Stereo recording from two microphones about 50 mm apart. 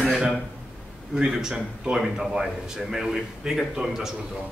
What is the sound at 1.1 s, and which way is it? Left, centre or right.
A man's voice, centre.